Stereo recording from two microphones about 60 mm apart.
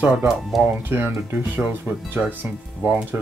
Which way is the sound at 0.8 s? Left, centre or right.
Right.